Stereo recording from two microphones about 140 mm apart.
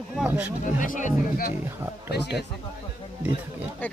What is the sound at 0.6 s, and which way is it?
Speech, 65° left (ahead or behind).